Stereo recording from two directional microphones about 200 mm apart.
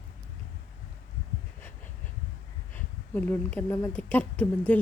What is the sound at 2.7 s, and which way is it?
Speech, 10° left (ahead or behind).